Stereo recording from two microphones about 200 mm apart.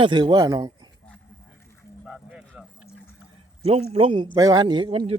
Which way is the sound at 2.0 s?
5° right (ahead or behind).